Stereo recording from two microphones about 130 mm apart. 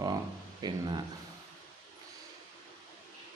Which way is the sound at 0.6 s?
30° right (ahead or behind).